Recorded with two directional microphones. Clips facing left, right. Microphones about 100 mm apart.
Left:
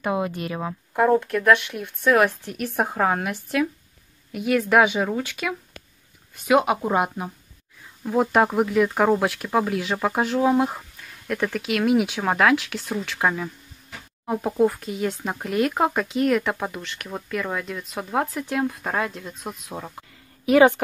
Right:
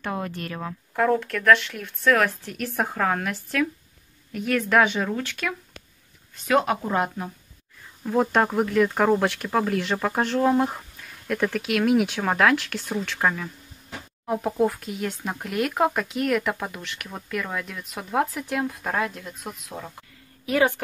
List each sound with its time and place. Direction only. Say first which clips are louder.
0.0 s speech: left 5 dB; 10° left (ahead or behind)
20.4 s a woman's voice: left 6 dB; 20° left (ahead or behind)